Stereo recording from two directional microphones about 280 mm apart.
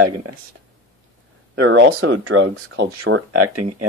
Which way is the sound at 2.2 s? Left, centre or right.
Right.